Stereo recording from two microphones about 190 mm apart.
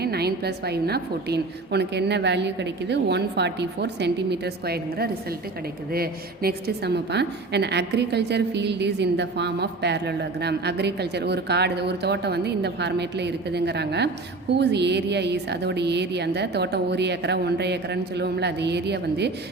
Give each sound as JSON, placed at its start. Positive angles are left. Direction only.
{"t": 0.0, "sound": "a woman's voice", "side_deg": -55}